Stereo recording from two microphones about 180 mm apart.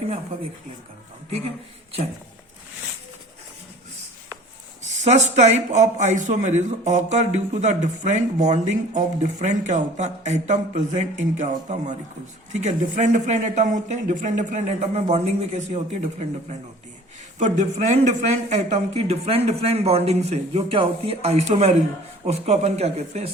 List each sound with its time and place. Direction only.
4.8 s speech: 40° right (ahead or behind)
17.4 s speech: 40° right (ahead or behind)